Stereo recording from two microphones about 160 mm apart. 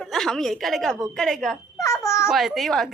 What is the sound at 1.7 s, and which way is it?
Babbling, 20° left (ahead or behind).